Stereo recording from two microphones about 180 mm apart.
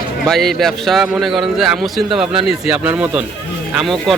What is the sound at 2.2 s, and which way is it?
Speech, 30° right (ahead or behind).